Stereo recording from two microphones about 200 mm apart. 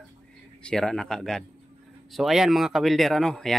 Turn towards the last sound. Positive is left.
turn(degrees=0)  # may be behind; listen again after turning